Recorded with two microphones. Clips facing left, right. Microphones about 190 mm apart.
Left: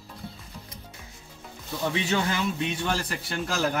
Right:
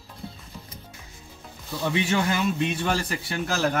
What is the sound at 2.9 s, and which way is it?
Speech, 5° right (ahead or behind).